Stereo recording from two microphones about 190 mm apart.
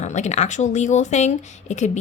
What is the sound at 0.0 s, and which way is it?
Speech, 40° left (ahead or behind).